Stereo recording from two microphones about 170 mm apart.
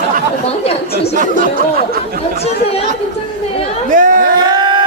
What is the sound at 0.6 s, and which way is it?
Speech, 35° left (ahead or behind).